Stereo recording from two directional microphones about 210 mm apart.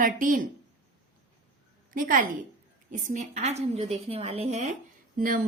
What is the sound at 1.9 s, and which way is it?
A woman's voice, 40° right (ahead or behind).